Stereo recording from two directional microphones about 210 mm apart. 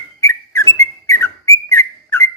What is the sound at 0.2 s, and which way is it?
Whistle, 15° left (ahead or behind).